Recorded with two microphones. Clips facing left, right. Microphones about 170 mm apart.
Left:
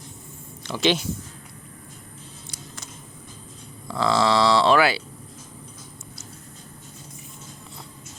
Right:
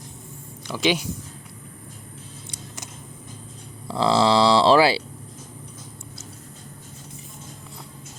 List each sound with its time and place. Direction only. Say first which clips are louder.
0.7 s speech: even; 10° right (ahead or behind)
3.8 s speech: right 2 dB; 30° right (ahead or behind)